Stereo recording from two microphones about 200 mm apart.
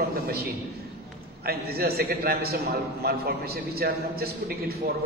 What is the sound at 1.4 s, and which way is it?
A man's voice, 50° right (ahead or behind).